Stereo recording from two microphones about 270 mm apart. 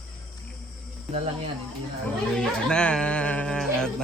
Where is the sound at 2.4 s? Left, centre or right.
Centre.